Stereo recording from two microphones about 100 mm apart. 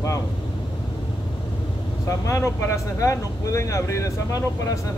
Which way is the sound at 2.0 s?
30° left (ahead or behind).